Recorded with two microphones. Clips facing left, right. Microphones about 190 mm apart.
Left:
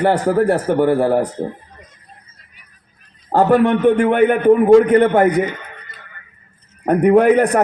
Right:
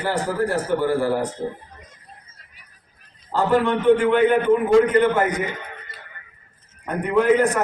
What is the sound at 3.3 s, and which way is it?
A man's voice, 60° left (ahead or behind).